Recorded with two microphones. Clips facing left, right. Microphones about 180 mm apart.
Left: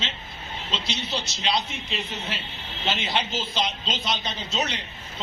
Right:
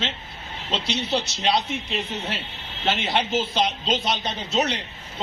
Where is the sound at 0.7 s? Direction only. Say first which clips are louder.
Right 6 dB; 60° right (ahead or behind).